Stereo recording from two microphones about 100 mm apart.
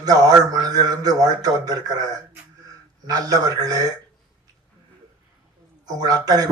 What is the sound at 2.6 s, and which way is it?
Speech, 40° right (ahead or behind).